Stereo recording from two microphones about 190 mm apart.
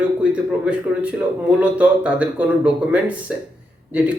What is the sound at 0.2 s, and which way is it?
Speech, 5° right (ahead or behind).